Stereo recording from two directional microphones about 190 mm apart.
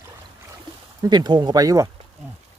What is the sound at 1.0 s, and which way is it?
Speech, 20° right (ahead or behind).